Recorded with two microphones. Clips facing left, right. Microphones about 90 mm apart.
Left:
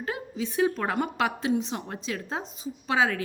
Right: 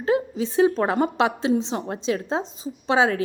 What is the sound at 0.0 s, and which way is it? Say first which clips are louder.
A woman's voice: right 10 dB; 30° right (ahead or behind).